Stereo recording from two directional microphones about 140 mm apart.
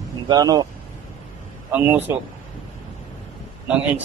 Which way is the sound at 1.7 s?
15° right (ahead or behind).